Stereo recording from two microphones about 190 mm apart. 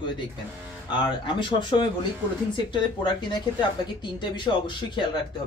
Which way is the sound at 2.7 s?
25° left (ahead or behind).